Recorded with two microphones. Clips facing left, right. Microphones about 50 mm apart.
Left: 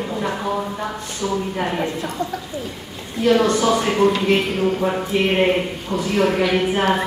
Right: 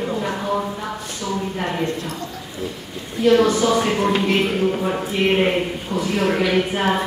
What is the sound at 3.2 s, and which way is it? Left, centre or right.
A woman's voice, centre.